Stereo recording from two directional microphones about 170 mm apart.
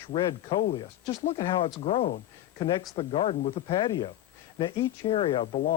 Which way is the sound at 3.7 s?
25° left (ahead or behind).